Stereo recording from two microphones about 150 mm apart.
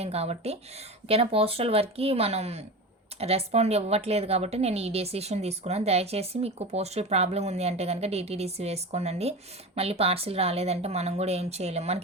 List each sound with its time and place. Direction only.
0.0 s speech: 45° right (ahead or behind)